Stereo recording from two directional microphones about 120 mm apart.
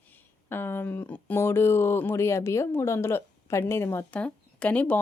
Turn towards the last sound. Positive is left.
turn(degrees=10)  # may be behind; listen again after turning